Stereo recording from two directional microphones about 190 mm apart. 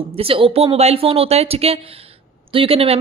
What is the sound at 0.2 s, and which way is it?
A woman's voice, 30° right (ahead or behind).